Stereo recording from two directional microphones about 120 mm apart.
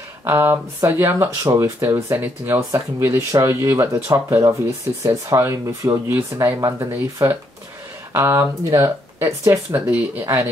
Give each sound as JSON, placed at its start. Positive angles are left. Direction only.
{"t": 0.2, "sound": "speech", "side_deg": -20}